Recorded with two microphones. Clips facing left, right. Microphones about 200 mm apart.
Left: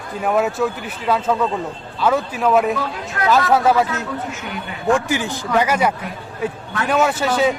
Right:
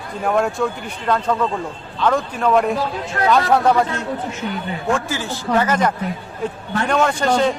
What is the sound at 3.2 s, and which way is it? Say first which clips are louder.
Speech: right 1 dB; 35° right (ahead or behind).